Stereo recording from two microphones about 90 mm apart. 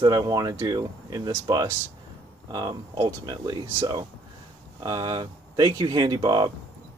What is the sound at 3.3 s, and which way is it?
Speech, 55° right (ahead or behind).